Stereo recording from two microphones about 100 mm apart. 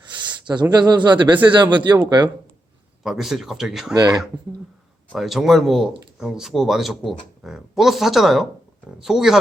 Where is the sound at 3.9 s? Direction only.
40° right (ahead or behind).